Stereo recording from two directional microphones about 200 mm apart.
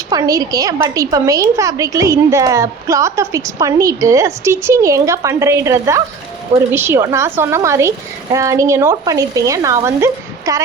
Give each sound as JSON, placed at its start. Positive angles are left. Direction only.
{"t": 0.1, "sound": "a woman's voice", "side_deg": -15}